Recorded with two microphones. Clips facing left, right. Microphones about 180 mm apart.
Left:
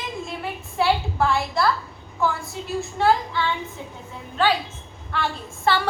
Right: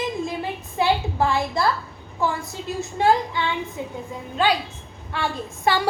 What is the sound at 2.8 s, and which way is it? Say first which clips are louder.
Speech: right 1 dB; 20° right (ahead or behind).